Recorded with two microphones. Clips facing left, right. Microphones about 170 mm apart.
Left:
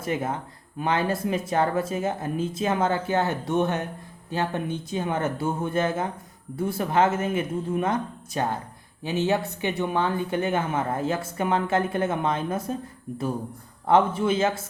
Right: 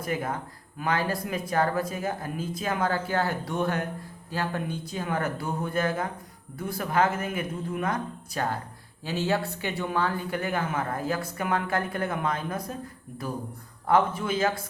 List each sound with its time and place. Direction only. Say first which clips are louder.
0.0 s speech: left 2 dB; 25° left (ahead or behind)
13.8 s speech: left 3 dB; 25° left (ahead or behind)